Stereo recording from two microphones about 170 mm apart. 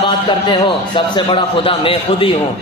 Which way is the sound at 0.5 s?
30° left (ahead or behind).